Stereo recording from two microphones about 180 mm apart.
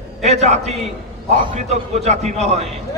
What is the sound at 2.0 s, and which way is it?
Speech, 40° right (ahead or behind).